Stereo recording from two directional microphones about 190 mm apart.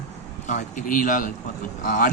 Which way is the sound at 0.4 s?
40° left (ahead or behind).